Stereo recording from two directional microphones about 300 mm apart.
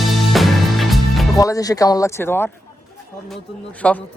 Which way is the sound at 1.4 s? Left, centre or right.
Centre.